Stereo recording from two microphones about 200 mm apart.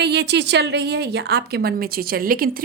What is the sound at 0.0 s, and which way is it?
Speech, 55° right (ahead or behind).